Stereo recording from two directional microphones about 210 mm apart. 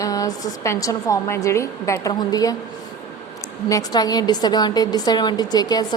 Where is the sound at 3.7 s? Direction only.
15° left (ahead or behind).